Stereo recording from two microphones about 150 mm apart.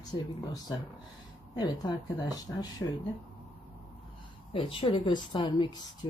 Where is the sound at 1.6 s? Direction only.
30° left (ahead or behind).